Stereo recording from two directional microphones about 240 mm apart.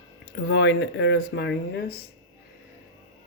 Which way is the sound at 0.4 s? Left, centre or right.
Left.